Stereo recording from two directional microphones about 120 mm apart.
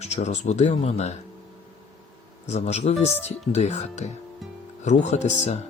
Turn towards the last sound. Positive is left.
turn(degrees=70)  # may be behind; listen again after turning